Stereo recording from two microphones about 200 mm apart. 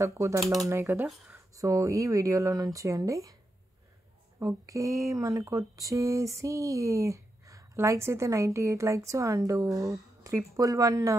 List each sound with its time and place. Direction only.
0.0 s speech: 15° right (ahead or behind)
4.4 s speech: 15° right (ahead or behind)